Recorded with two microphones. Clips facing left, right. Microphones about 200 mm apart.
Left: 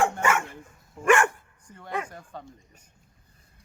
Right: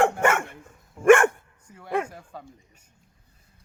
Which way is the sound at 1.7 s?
5° right (ahead or behind).